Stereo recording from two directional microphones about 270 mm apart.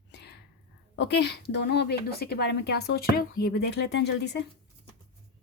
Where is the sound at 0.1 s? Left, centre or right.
Left.